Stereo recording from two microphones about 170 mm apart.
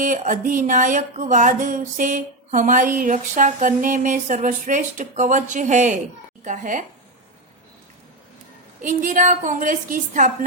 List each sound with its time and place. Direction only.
0.0 s music: 50° right (ahead or behind)
6.4 s a woman's voice: 45° right (ahead or behind)
8.8 s music: 50° right (ahead or behind)